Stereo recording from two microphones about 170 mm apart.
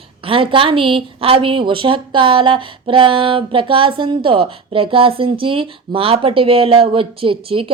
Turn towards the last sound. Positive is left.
turn(degrees=-30)  # may be behind; listen again after turning